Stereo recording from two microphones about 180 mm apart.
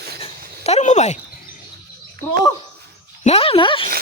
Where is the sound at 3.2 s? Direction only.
35° left (ahead or behind).